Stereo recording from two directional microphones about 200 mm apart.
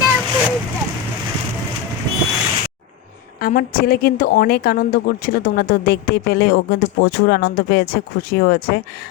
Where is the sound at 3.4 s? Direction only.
45° left (ahead or behind).